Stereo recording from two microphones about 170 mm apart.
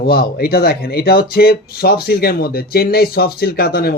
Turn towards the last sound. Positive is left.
turn(degrees=65)  # may be behind; listen again after turning